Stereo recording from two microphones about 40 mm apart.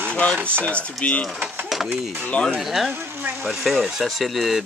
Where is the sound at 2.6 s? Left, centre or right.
Centre.